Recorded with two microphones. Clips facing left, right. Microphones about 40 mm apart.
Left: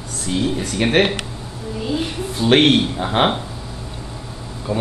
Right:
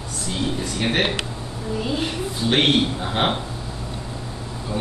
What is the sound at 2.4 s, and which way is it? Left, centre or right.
Speech, left.